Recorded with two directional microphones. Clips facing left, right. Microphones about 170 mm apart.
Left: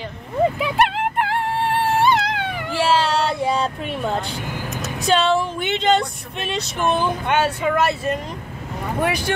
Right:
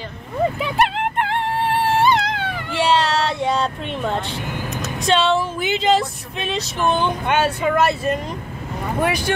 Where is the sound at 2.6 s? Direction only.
Centre (ahead or behind).